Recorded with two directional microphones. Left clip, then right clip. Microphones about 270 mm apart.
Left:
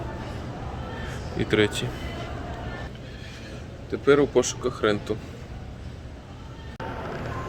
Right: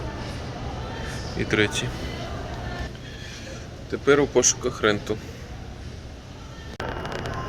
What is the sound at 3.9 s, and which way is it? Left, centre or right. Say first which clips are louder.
Speech: even; centre.